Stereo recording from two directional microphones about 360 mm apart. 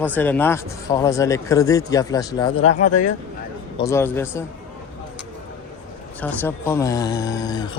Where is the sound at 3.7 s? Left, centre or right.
Centre.